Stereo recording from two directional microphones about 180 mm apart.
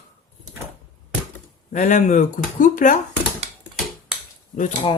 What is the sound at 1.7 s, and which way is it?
Speech, 45° left (ahead or behind).